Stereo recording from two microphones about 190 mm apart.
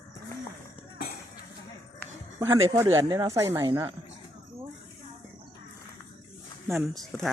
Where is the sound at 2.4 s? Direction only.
15° right (ahead or behind).